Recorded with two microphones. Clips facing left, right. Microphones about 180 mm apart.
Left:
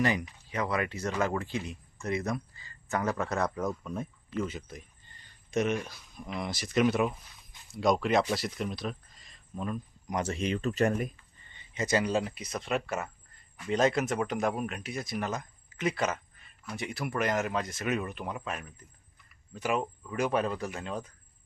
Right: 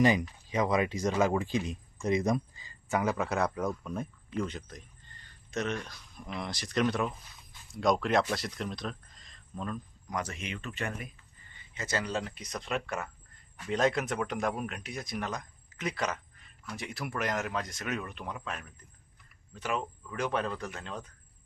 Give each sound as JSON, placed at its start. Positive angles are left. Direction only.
{"t": 0.0, "sound": "speech", "side_deg": -15}
{"t": 3.0, "sound": "speech", "side_deg": 0}
{"t": 10.1, "sound": "speech", "side_deg": 25}
{"t": 11.7, "sound": "speech", "side_deg": 15}